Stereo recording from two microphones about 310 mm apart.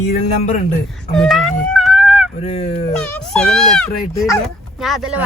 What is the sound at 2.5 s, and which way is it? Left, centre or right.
Speech, centre.